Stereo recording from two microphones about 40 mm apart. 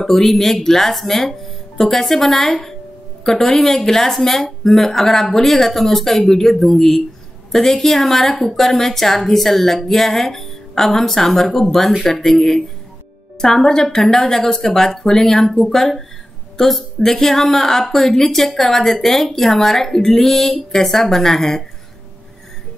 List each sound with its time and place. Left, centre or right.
0.0 s a woman's voice: centre